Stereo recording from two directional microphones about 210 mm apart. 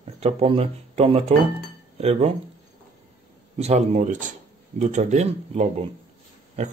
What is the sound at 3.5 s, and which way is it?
Speech, 30° right (ahead or behind).